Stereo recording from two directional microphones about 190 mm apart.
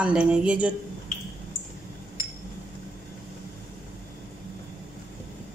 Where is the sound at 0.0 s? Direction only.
5° right (ahead or behind).